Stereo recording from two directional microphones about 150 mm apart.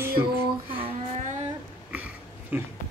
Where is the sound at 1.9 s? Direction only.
10° right (ahead or behind).